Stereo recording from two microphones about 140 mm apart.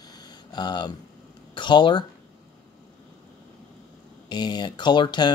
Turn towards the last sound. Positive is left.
turn(degrees=35)  # may be behind; listen again after turning